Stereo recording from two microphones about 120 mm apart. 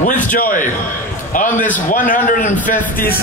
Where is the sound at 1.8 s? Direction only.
90° left.